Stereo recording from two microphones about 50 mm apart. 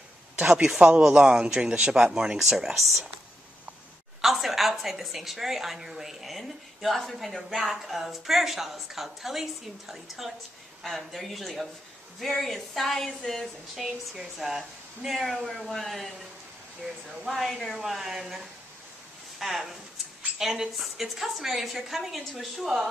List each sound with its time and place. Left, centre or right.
0.4 s speech: centre
4.2 s a woman's voice: centre
17.2 s a woman's voice: centre